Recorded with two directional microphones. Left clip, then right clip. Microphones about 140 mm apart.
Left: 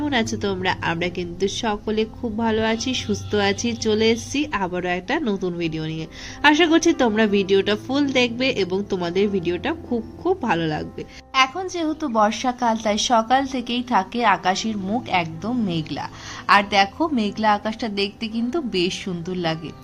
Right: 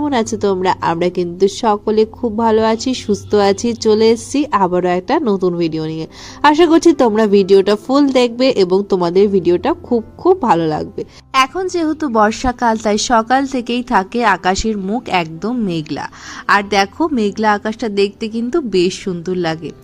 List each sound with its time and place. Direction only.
0.0 s speech: 35° right (ahead or behind)